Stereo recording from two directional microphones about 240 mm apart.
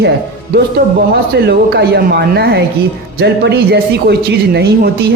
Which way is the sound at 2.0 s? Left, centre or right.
Right.